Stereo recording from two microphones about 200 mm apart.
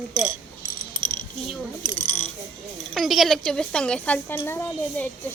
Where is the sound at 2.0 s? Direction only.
10° left (ahead or behind).